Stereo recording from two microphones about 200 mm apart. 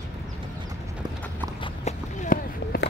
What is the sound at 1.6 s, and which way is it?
Walk, 35° left (ahead or behind).